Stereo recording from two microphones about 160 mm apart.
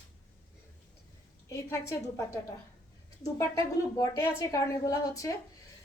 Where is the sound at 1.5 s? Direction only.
15° left (ahead or behind).